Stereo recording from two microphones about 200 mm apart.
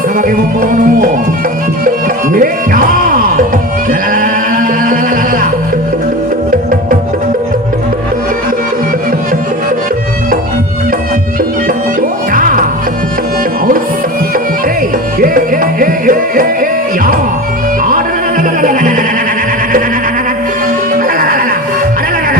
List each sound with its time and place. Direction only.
0.2 s music: 40° right (ahead or behind)
2.3 s music: 45° right (ahead or behind)
11.9 s music: 45° right (ahead or behind)
15.2 s music: 45° right (ahead or behind)
20.9 s music: 45° right (ahead or behind)